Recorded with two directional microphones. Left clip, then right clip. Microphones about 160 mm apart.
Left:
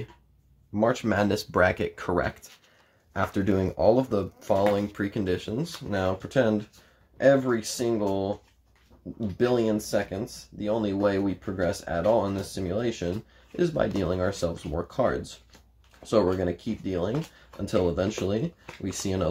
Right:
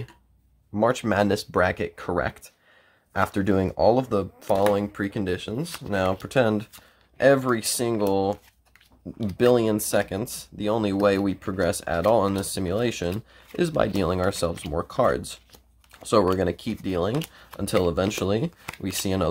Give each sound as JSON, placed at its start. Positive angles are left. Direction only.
{"t": 0.7, "sound": "speech", "side_deg": -25}
{"t": 3.1, "sound": "speech", "side_deg": -30}